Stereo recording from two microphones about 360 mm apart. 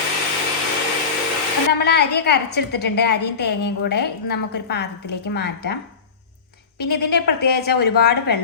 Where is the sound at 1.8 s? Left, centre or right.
Left.